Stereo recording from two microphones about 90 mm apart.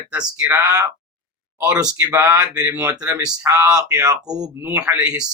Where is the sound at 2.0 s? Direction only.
25° right (ahead or behind).